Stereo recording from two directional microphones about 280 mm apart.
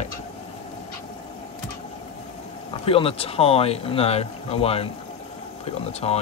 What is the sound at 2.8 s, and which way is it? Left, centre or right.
Speech, centre.